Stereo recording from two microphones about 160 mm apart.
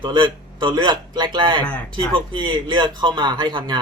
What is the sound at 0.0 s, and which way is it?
Speech, 30° right (ahead or behind).